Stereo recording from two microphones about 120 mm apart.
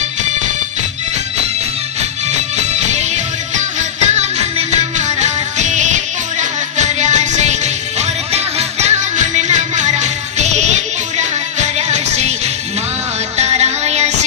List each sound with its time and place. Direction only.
2.0 s music: 70° right (ahead or behind)
13.3 s music: 65° right (ahead or behind)